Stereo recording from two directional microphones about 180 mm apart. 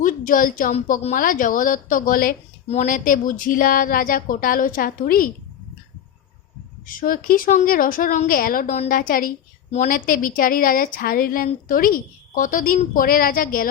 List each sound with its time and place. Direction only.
0.0 s a woman's voice: 50° left (ahead or behind)
6.8 s a woman's voice: 50° left (ahead or behind)